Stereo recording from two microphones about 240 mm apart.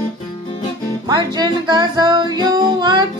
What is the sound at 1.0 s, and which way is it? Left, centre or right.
Music, centre.